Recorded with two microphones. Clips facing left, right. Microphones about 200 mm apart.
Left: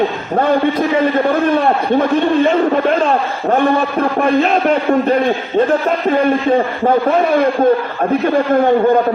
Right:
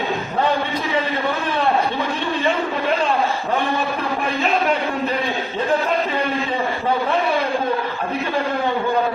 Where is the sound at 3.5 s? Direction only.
50° left (ahead or behind).